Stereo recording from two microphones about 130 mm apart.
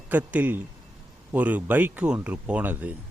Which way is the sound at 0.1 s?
10° right (ahead or behind).